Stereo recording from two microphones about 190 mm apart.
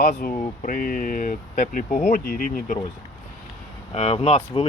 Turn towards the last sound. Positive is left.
turn(degrees=30)  # may be behind; listen again after turning